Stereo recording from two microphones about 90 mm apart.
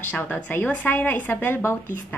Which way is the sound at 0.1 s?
20° left (ahead or behind).